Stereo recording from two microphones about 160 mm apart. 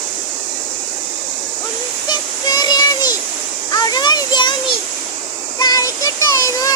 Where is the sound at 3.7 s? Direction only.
25° left (ahead or behind).